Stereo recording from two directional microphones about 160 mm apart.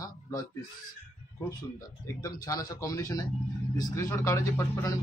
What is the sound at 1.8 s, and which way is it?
A man's voice, 20° left (ahead or behind).